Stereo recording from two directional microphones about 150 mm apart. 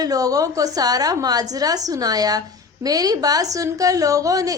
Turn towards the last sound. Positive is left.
turn(degrees=-20)  # may be behind; listen again after turning